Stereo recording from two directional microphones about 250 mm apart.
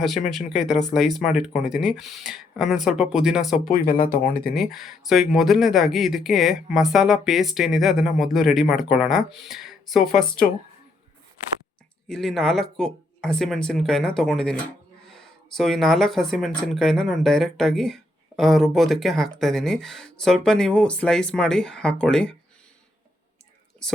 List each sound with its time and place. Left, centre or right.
0.3 s speech: centre
3.6 s speech: left
4.5 s speech: centre
12.0 s speech: centre